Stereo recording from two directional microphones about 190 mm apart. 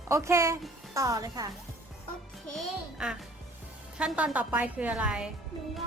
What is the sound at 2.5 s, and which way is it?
A child's voice, 5° right (ahead or behind).